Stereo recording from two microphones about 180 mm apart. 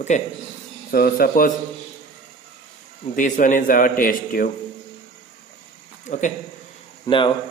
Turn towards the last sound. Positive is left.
turn(degrees=30)  # may be behind; listen again after turning